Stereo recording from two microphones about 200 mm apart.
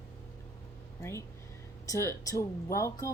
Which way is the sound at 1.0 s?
15° left (ahead or behind).